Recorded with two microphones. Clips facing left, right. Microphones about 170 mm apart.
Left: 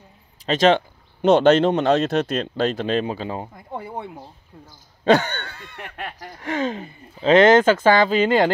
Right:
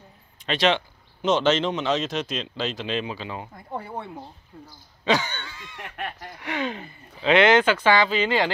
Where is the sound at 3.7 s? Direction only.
15° left (ahead or behind).